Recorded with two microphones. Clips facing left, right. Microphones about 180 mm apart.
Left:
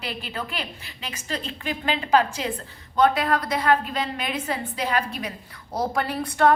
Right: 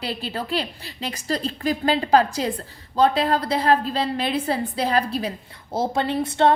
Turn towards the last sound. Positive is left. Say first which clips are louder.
# right 2 dB
turn(degrees=-25)  # may be behind; listen again after turning